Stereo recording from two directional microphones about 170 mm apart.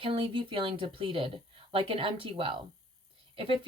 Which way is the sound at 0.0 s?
30° right (ahead or behind).